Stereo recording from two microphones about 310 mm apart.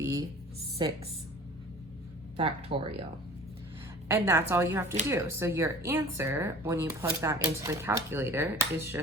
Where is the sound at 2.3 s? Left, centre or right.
Centre.